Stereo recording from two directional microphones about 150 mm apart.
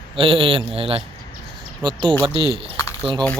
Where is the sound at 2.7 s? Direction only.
20° left (ahead or behind).